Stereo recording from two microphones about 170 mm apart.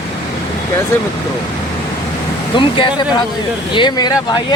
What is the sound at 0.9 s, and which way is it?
Speech, 15° left (ahead or behind).